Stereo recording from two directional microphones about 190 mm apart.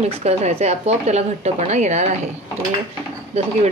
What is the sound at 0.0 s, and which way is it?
A woman's voice, 35° right (ahead or behind).